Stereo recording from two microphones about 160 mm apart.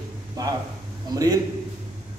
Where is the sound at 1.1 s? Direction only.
25° right (ahead or behind).